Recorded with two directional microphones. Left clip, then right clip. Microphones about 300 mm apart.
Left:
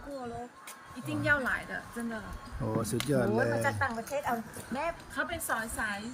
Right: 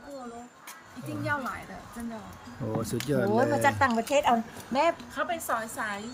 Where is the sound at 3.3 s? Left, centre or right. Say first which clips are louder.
Right 5 dB; right.